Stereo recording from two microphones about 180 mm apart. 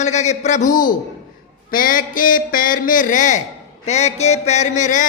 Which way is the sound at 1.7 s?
50° left (ahead or behind).